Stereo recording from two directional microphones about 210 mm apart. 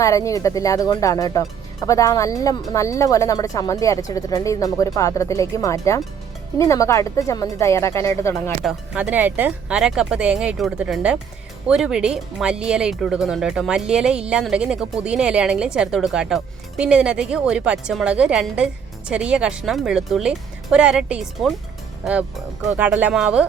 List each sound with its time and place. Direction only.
0.0 s speech: 15° left (ahead or behind)
8.6 s speech: 5° right (ahead or behind)
22.6 s speech: 5° right (ahead or behind)